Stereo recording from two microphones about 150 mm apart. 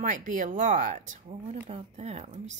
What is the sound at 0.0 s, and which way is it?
Speech, 55° right (ahead or behind).